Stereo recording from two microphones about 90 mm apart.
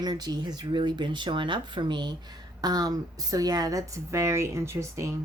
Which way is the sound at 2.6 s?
45° right (ahead or behind).